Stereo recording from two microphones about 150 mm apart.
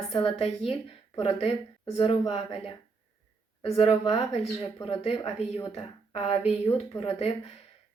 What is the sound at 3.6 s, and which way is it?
Speech, 40° left (ahead or behind).